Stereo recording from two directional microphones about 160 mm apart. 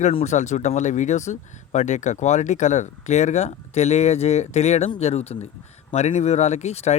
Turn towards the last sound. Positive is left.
turn(degrees=40)  # may be behind; listen again after turning